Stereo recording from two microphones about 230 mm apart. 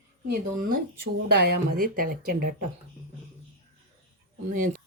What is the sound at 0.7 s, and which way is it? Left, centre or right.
Speech, right.